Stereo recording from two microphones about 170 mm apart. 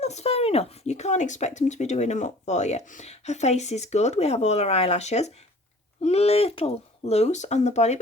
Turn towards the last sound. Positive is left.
turn(degrees=40)  # may be behind; listen again after turning